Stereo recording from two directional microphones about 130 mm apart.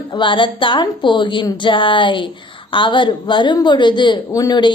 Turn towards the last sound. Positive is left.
turn(degrees=30)  # may be behind; listen again after turning